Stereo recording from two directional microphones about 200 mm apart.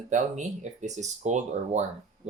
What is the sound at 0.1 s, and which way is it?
Speech, 40° right (ahead or behind).